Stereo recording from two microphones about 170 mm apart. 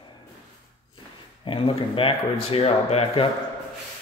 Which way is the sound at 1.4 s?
30° left (ahead or behind).